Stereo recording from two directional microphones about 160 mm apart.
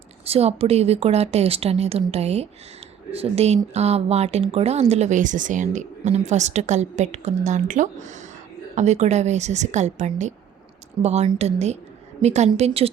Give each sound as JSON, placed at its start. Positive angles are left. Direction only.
{"t": 0.3, "sound": "a woman's voice", "side_deg": -40}